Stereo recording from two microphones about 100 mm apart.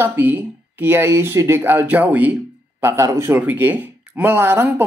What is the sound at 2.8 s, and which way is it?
Speech, 25° right (ahead or behind).